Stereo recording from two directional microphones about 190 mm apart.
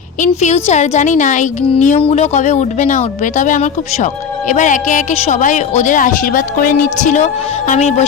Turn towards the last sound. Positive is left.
turn(degrees=35)  # may be behind; listen again after turning